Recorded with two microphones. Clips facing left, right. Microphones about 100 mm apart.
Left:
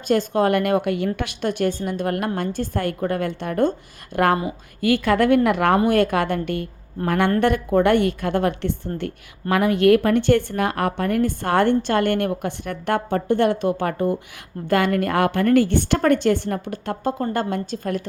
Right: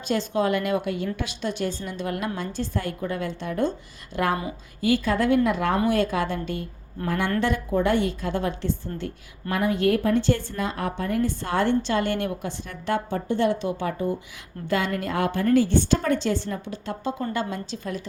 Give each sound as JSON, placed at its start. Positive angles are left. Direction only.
{"t": 0.1, "sound": "a woman's voice", "side_deg": 50}